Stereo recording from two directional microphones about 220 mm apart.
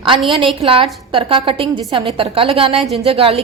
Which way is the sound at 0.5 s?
25° right (ahead or behind).